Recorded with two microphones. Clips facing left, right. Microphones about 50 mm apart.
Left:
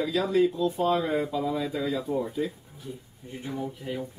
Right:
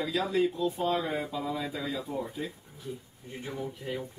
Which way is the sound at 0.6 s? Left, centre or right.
Left.